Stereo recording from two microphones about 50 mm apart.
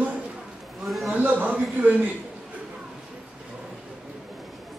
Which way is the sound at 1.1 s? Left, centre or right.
Right.